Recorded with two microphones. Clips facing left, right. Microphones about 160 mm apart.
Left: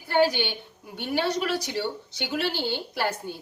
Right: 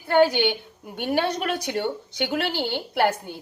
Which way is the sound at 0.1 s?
55° right (ahead or behind).